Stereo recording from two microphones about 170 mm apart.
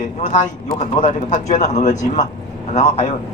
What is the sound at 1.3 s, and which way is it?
A man's voice, 45° left (ahead or behind).